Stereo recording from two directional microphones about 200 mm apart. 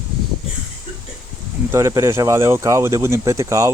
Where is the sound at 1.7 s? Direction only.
15° right (ahead or behind).